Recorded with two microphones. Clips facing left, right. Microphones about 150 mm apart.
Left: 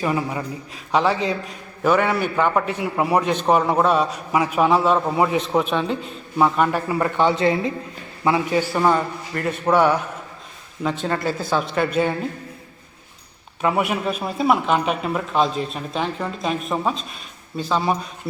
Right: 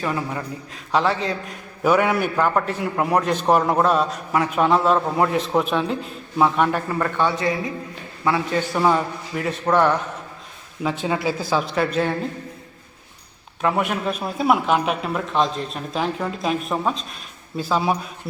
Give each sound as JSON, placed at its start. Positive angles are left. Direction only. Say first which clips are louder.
{"t": 0.0, "sound": "a man's voice", "louder": "left 2 dB", "side_deg": 10}
{"t": 1.8, "sound": "a man's voice", "louder": "even", "side_deg": -5}
{"t": 8.7, "sound": "a man's voice", "louder": "right 2 dB", "side_deg": 0}
{"t": 11.0, "sound": "a man's voice", "louder": "even", "side_deg": -5}
{"t": 13.6, "sound": "a man's voice", "louder": "left 1 dB", "side_deg": 5}